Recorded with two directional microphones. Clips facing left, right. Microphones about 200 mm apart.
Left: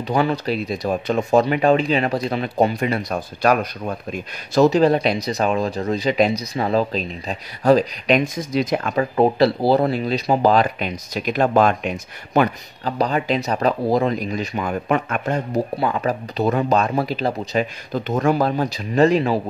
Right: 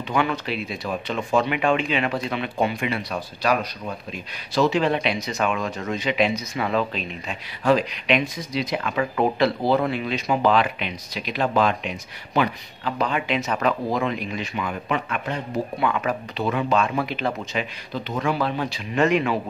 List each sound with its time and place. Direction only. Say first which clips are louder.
0.1 s speech: left 4 dB; 35° left (ahead or behind)